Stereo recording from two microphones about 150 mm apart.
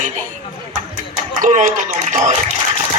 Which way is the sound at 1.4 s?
60° right (ahead or behind).